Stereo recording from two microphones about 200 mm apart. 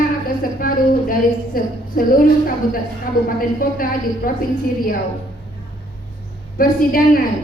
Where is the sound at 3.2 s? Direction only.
45° left (ahead or behind).